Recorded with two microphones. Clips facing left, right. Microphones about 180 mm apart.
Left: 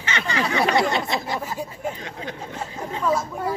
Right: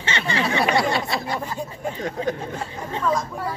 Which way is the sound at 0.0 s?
30° right (ahead or behind).